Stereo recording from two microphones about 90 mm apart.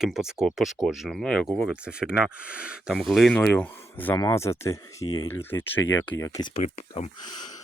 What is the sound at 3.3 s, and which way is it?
Speech, 15° left (ahead or behind).